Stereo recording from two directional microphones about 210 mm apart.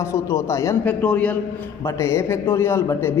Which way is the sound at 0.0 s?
15° left (ahead or behind).